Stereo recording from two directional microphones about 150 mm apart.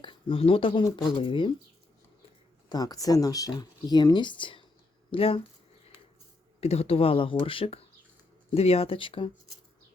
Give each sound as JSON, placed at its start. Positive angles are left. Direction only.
{"t": 0.0, "sound": "speech", "side_deg": 35}
{"t": 2.6, "sound": "speech", "side_deg": 25}
{"t": 6.6, "sound": "speech", "side_deg": 45}